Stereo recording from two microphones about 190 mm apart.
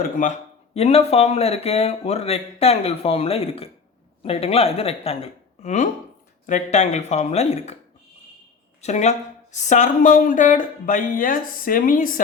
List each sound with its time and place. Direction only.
0.2 s speech: 35° left (ahead or behind)
8.8 s a woman's voice: 35° left (ahead or behind)